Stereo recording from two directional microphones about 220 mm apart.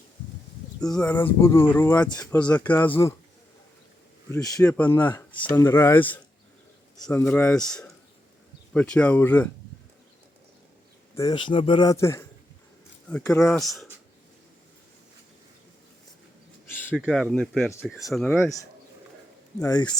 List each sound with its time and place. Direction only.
0.8 s speech: 5° left (ahead or behind)
4.3 s speech: 15° left (ahead or behind)
11.1 s speech: 15° left (ahead or behind); by 13.9 s centre (ahead or behind)
16.6 s a sound: 10° left (ahead or behind)
17.0 s speech: centre (ahead or behind)
19.7 s speech: 20° left (ahead or behind)